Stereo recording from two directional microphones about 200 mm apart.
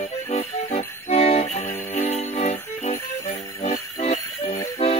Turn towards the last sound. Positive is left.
turn(degrees=30)  # may be behind; listen again after turning